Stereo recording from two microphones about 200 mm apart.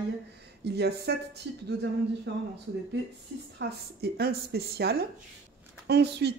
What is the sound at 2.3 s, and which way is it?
Speech, 60° right (ahead or behind).